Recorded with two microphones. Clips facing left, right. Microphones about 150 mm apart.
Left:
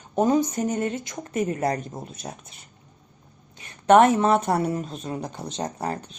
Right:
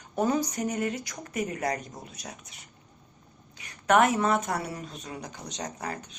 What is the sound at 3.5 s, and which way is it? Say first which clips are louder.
Speech: left 7 dB; 30° left (ahead or behind).